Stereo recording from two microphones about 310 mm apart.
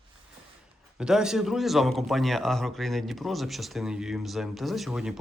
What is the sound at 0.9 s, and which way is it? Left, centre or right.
Speech, centre.